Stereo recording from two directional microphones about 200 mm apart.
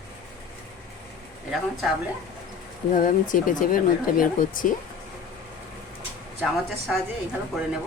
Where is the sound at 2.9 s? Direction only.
40° left (ahead or behind).